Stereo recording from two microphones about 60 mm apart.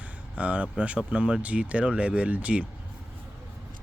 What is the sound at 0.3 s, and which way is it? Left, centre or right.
Speech, right.